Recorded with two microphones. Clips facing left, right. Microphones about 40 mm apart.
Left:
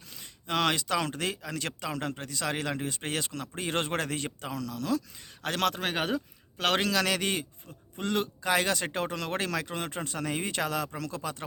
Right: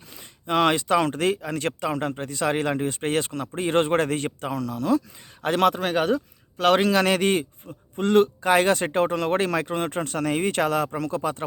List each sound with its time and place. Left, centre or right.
0.4 s speech: right
5.8 s speech: centre
6.8 s speech: right
10.0 s speech: right